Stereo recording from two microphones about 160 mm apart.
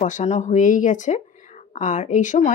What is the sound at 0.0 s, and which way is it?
Speech, 50° left (ahead or behind).